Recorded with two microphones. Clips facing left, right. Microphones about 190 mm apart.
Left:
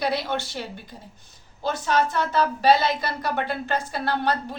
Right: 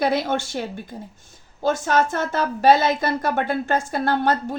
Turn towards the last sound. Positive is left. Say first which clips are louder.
# right 4 dB
turn(degrees=-45)  # may be behind; listen again after turning